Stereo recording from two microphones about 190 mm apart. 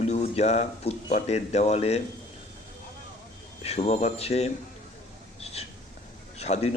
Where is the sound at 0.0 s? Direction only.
35° left (ahead or behind).